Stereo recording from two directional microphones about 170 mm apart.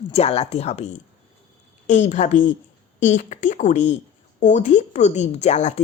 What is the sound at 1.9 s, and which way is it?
Speech, 45° left (ahead or behind).